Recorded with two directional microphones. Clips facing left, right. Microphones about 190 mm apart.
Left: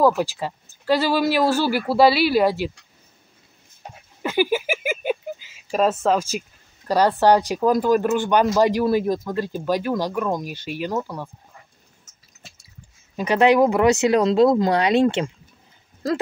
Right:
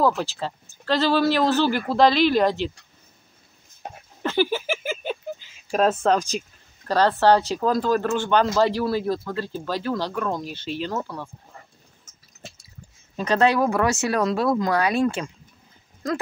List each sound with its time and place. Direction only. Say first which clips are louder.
0.0 s speech: left 3 dB; 15° left (ahead or behind)
3.8 s speech: right 3 dB; 55° right (ahead or behind)
4.2 s a sound: left 2 dB; 10° left (ahead or behind)
6.9 s speech: left 1 dB; 15° left (ahead or behind)
13.1 s speech: left 3 dB; 10° left (ahead or behind)